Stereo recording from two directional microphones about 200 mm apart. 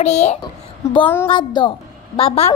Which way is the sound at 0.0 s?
35° left (ahead or behind).